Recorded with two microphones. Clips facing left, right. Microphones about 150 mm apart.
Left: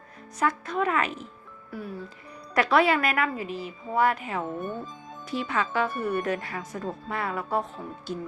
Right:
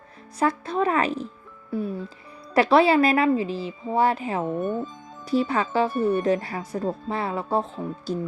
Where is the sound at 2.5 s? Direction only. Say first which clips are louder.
Right 5 dB; 30° right (ahead or behind).